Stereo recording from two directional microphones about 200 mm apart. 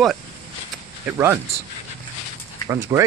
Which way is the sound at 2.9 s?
15° right (ahead or behind).